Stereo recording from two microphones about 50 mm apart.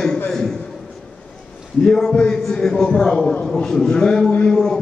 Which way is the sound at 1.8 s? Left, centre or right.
Centre.